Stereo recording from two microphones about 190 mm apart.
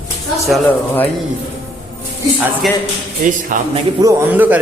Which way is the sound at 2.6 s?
Centre (ahead or behind).